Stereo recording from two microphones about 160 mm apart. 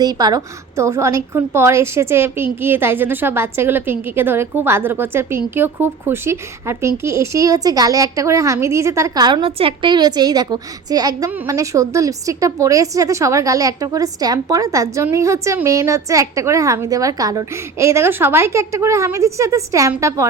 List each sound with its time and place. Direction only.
0.0 s a woman's voice: 25° right (ahead or behind)